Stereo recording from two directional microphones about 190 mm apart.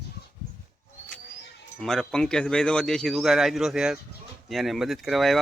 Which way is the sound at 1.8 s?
5° left (ahead or behind).